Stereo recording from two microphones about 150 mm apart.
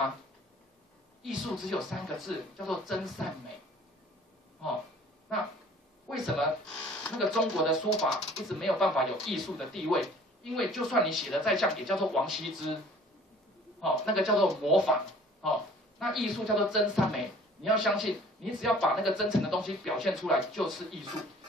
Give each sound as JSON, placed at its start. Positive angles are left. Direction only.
{"t": 1.2, "sound": "speech", "side_deg": 0}
{"t": 6.0, "sound": "speech", "side_deg": 0}
{"t": 13.7, "sound": "speech", "side_deg": 0}
{"t": 16.0, "sound": "speech", "side_deg": 0}